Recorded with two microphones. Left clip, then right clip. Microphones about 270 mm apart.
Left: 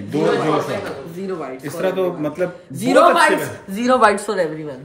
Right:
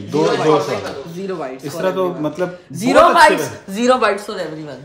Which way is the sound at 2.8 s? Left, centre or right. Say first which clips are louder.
Right 2 dB; right.